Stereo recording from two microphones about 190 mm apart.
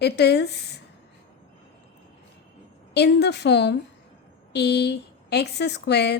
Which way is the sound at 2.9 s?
60° left (ahead or behind).